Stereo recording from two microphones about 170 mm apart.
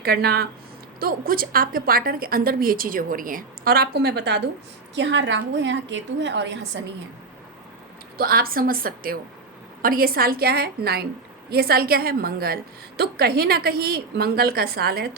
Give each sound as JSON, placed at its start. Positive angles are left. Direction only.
{"t": 0.0, "sound": "a woman's voice", "side_deg": -65}
{"t": 4.9, "sound": "a woman's voice", "side_deg": -90}
{"t": 8.2, "sound": "a woman's voice", "side_deg": -60}